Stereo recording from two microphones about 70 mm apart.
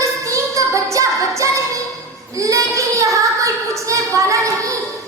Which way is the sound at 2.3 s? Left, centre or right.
Right.